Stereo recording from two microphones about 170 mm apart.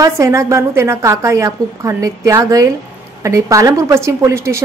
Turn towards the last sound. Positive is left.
turn(degrees=-15)  # may be behind; listen again after turning